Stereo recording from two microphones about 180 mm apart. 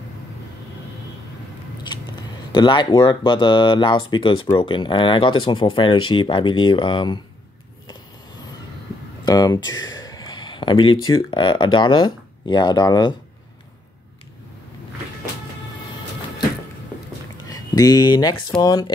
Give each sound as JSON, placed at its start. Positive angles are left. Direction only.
{"t": 2.5, "sound": "speech", "side_deg": 25}
{"t": 9.2, "sound": "speech", "side_deg": 20}
{"t": 17.5, "sound": "a sound", "side_deg": 20}
{"t": 18.6, "sound": "speech", "side_deg": 20}